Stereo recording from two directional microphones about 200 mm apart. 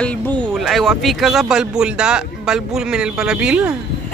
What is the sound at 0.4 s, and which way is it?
Speech, centre (ahead or behind).